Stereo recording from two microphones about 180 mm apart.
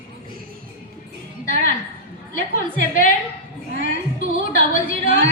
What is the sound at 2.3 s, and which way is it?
Speech, 50° left (ahead or behind).